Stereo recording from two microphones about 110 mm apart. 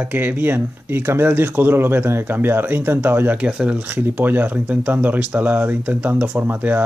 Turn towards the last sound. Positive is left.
turn(degrees=-15)  # may be behind; listen again after turning